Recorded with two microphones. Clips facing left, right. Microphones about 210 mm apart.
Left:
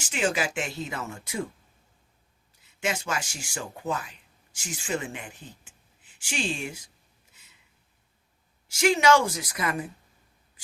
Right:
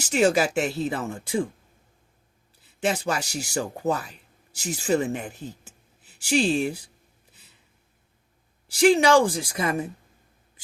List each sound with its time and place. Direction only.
0.0 s speech: 40° right (ahead or behind)
2.6 s speech: 35° right (ahead or behind)
8.6 s speech: 35° right (ahead or behind)